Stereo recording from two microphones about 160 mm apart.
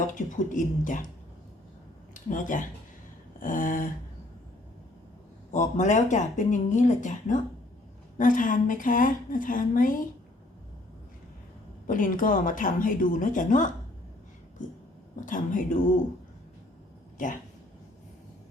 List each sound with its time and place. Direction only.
0.1 s speech: 55° left (ahead or behind)
2.1 s a woman's voice: 55° left (ahead or behind)
5.5 s a woman's voice: 50° left (ahead or behind)
11.9 s a woman's voice: 55° left (ahead or behind)
15.2 s a woman's voice: 55° left (ahead or behind)